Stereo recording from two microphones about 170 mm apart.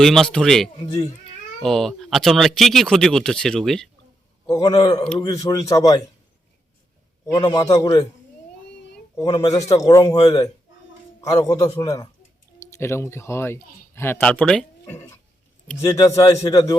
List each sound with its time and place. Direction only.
0.0 s speech: centre (ahead or behind)
4.4 s a man's voice: 20° left (ahead or behind)
7.3 s a man's voice: 25° left (ahead or behind)
9.1 s a man's voice: 20° left (ahead or behind)